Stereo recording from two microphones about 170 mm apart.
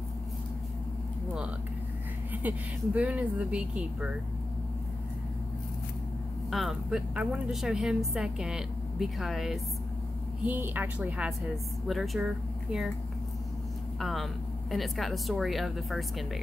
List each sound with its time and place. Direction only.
2.3 s speech: 10° right (ahead or behind)
6.5 s a woman's voice: centre (ahead or behind)
13.9 s a woman's voice: centre (ahead or behind)